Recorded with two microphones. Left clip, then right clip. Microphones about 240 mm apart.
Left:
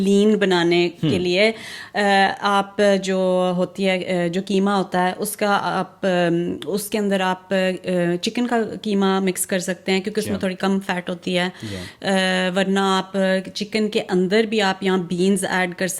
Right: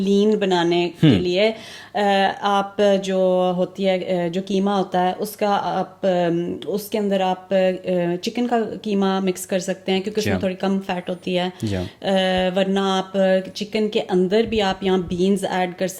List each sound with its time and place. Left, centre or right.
0.0 s speech: left